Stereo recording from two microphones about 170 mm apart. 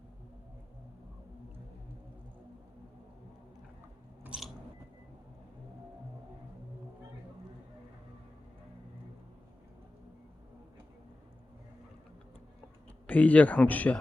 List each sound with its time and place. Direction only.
4.2 s biting: 5° right (ahead or behind)
13.1 s speech: 10° left (ahead or behind)